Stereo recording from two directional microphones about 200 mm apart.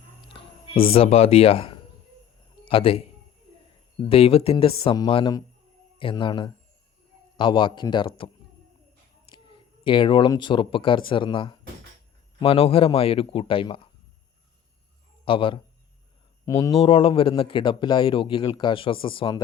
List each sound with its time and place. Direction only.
0.3 s a sound: 25° left (ahead or behind)
0.9 s a man's voice: 30° left (ahead or behind)
9.3 s a man's voice: 25° left (ahead or behind)
15.2 s a man's voice: 25° left (ahead or behind)
16.7 s a man's voice: 25° left (ahead or behind)